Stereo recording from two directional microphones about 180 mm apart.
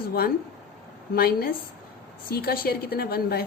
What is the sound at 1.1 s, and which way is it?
A woman's voice, 55° left (ahead or behind).